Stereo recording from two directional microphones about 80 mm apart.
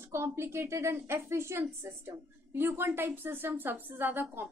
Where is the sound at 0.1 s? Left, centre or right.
Right.